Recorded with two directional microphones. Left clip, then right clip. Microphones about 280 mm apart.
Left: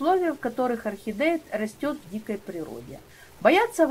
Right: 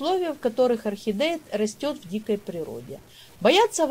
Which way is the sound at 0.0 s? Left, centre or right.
Right.